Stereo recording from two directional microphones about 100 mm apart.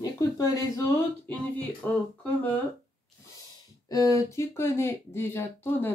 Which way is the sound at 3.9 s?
35° left (ahead or behind).